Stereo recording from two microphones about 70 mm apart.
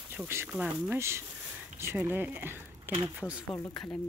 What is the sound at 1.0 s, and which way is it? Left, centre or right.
Speech, right.